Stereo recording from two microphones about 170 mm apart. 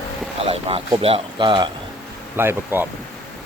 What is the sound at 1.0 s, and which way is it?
Speech, 30° right (ahead or behind).